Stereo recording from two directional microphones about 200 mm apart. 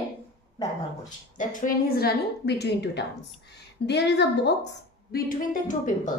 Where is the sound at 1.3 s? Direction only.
40° left (ahead or behind).